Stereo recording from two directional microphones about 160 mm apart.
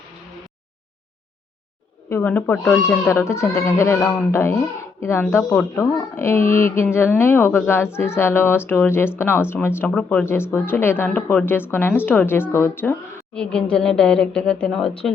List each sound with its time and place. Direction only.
2.0 s speech: 15° left (ahead or behind)